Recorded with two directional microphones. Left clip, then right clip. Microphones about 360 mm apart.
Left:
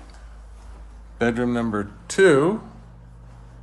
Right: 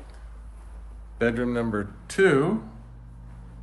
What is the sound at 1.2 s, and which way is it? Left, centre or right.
Speech, centre.